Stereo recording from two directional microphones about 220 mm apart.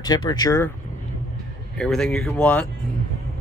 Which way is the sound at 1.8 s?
5° left (ahead or behind).